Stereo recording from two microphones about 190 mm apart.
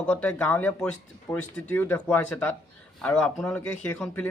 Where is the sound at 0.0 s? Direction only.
5° left (ahead or behind).